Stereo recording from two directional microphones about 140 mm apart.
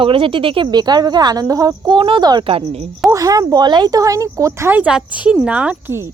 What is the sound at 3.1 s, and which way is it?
Speech, 25° right (ahead or behind).